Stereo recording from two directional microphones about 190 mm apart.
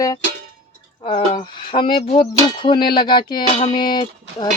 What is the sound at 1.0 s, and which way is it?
Speech, 30° left (ahead or behind).